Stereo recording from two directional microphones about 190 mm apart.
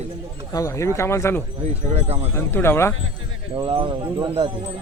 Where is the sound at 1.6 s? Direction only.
35° right (ahead or behind).